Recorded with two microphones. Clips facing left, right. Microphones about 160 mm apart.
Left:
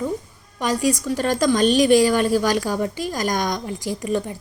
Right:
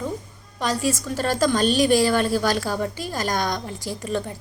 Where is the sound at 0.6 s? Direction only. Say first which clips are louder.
Left 3 dB; 15° left (ahead or behind).